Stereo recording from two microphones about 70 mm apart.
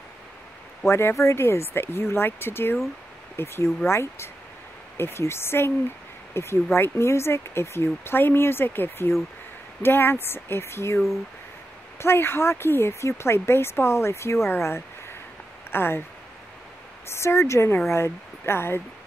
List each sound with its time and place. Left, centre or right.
0.8 s speech: left
12.0 s speech: left
17.1 s speech: left